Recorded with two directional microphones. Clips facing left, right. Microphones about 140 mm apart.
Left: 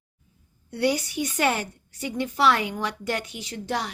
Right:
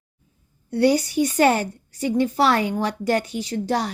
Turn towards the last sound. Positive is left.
turn(degrees=-35)  # may be behind; listen again after turning